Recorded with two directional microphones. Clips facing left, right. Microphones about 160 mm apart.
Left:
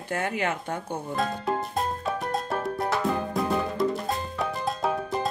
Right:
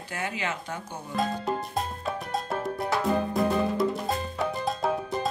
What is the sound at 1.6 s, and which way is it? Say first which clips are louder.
Music: left 3 dB; centre (ahead or behind).